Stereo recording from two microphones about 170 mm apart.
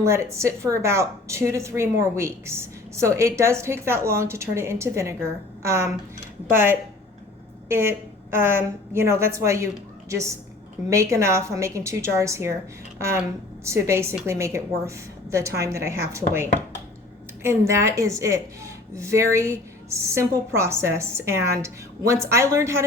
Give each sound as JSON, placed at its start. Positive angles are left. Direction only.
{"t": 0.0, "sound": "a woman's voice", "side_deg": -15}